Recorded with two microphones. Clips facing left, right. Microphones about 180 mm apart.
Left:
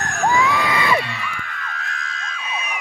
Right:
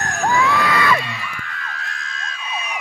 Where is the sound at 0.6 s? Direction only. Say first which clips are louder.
Right 2 dB; 20° left (ahead or behind).